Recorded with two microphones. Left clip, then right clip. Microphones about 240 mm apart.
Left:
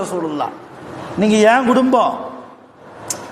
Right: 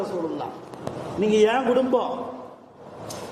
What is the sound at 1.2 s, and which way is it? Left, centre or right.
Speech, left.